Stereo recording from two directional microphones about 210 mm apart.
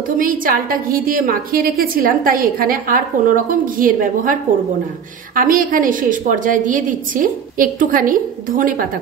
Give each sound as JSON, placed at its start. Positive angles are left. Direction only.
{"t": 0.2, "sound": "a woman's voice", "side_deg": -40}